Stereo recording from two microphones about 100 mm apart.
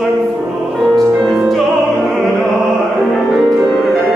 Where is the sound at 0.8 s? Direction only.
Centre (ahead or behind).